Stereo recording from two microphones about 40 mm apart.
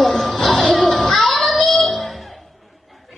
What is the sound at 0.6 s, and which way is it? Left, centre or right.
Children playing, centre.